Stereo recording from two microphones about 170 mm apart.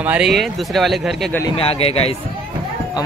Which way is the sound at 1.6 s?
35° left (ahead or behind).